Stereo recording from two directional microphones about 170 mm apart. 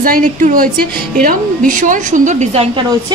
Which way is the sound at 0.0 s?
55° right (ahead or behind).